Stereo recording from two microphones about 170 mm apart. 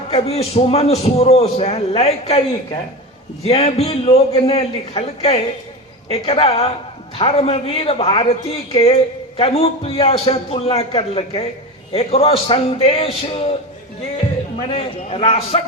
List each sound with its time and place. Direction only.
0.1 s a man's voice: 35° left (ahead or behind)
3.4 s a man's voice: 35° left (ahead or behind)
14.7 s a man's voice: 35° left (ahead or behind)